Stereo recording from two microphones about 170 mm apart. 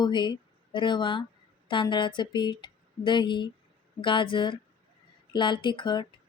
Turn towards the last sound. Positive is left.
turn(degrees=25)  # may be behind; listen again after turning